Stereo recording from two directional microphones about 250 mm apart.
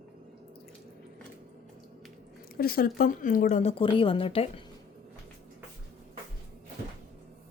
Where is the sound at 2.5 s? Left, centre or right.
Left.